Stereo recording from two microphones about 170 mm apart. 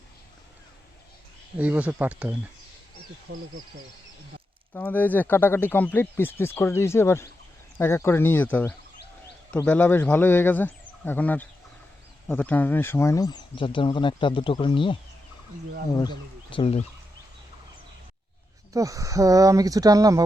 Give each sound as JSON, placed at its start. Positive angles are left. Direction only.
{"t": 1.5, "sound": "speech", "side_deg": -10}
{"t": 4.7, "sound": "speech", "side_deg": 10}
{"t": 16.0, "sound": "speech", "side_deg": 30}
{"t": 18.7, "sound": "speech", "side_deg": -20}